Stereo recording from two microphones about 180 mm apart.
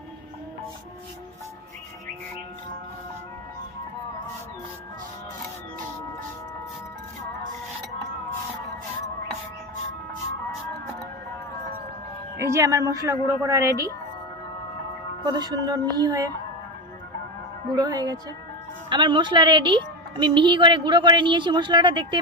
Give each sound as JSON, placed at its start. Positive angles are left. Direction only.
{"t": 12.4, "sound": "speech", "side_deg": -15}
{"t": 15.2, "sound": "a woman's voice", "side_deg": -20}
{"t": 17.7, "sound": "a woman's voice", "side_deg": -20}